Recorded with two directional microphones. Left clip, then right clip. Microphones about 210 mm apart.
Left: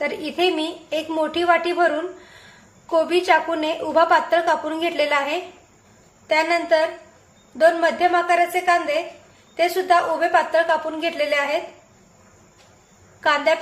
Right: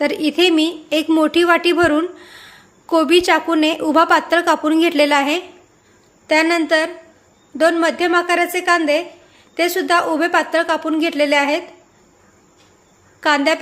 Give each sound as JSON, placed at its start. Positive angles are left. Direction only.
{"t": 0.0, "sound": "a woman's voice", "side_deg": -55}
{"t": 13.1, "sound": "a woman's voice", "side_deg": -55}